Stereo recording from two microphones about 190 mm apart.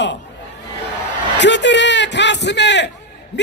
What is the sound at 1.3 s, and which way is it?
Speech, 70° left (ahead or behind).